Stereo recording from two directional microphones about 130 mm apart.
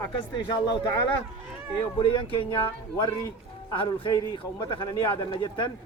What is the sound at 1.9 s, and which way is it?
Speech, 45° left (ahead or behind).